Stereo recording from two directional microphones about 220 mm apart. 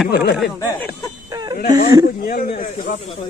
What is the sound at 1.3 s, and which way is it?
Wail, 20° right (ahead or behind).